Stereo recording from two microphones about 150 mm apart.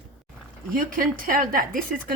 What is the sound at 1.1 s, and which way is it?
A woman's voice, 70° right (ahead or behind).